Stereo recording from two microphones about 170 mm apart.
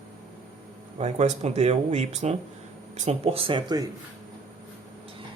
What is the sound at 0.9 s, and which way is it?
Speech, 40° right (ahead or behind).